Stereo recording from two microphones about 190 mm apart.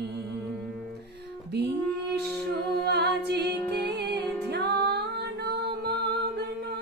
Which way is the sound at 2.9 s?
60° right (ahead or behind).